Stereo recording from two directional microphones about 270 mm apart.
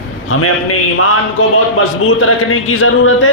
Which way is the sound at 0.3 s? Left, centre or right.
Left.